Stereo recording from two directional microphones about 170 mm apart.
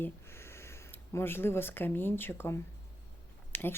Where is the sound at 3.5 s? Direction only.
10° left (ahead or behind).